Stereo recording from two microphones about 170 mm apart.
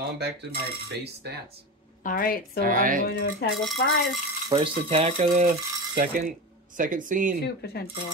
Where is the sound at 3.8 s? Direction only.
85° left.